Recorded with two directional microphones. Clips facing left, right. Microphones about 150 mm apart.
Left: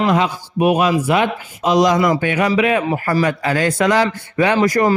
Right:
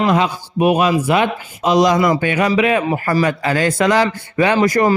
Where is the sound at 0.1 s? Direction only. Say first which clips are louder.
Right 1 dB; 30° right (ahead or behind).